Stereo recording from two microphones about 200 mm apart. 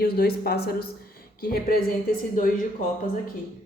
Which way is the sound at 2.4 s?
40° left (ahead or behind).